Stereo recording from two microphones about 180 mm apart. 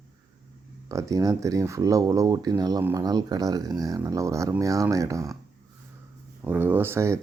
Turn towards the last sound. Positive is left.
turn(degrees=-15)  # may be behind; listen again after turning